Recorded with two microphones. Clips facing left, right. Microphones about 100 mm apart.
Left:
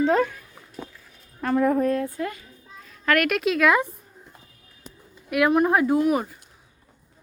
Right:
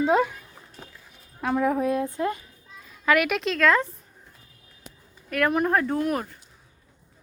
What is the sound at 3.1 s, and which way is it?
Speech, centre (ahead or behind).